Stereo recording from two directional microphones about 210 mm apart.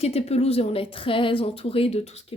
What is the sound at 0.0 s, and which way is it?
Speech, 30° left (ahead or behind).